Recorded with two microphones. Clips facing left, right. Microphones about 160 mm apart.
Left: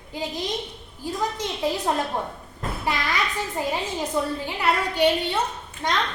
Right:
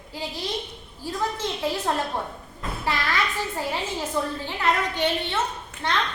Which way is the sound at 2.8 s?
15° left (ahead or behind).